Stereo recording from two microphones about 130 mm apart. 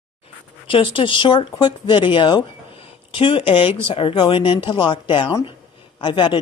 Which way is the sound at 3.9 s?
40° left (ahead or behind).